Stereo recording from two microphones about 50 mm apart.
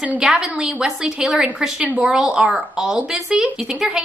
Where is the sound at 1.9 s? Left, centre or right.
Right.